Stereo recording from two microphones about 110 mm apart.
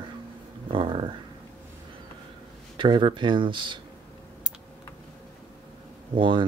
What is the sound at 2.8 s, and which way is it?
Speech, 50° right (ahead or behind).